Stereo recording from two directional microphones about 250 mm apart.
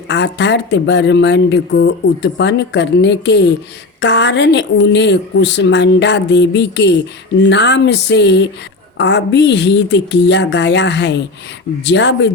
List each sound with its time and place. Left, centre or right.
0.1 s speech: left